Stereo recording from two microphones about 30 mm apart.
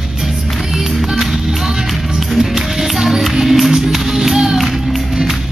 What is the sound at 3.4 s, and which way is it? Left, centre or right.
Music, centre.